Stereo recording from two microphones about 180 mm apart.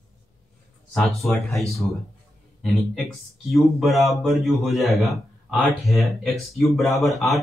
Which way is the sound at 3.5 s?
Centre (ahead or behind).